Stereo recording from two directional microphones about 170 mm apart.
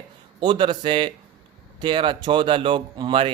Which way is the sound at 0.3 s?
30° right (ahead or behind).